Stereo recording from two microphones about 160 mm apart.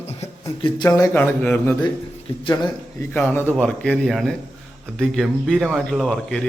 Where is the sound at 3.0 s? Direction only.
15° left (ahead or behind).